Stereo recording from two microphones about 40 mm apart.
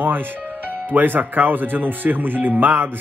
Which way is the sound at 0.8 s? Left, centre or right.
Right.